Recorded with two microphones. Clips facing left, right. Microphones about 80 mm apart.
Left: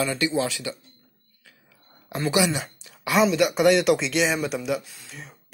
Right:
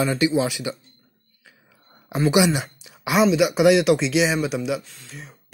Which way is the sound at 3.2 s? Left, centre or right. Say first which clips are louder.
Right 3 dB; centre.